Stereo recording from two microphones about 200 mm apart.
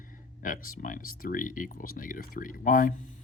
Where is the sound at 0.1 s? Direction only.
45° left (ahead or behind).